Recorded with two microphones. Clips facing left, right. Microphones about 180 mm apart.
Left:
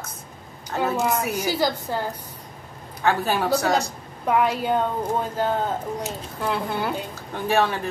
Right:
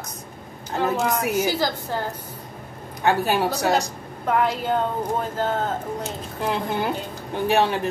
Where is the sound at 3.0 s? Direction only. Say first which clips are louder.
Right 2 dB; 15° right (ahead or behind).